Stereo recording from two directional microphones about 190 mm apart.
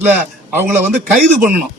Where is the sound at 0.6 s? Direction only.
5° right (ahead or behind).